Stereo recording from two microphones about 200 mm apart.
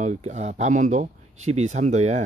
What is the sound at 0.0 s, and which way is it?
A man's voice, 35° right (ahead or behind).